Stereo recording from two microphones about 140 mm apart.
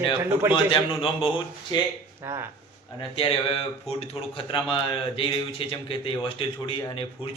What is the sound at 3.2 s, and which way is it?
A man's voice, 40° left (ahead or behind).